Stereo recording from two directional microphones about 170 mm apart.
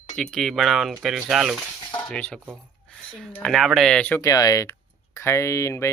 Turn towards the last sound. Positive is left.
turn(degrees=15)  # may be behind; listen again after turning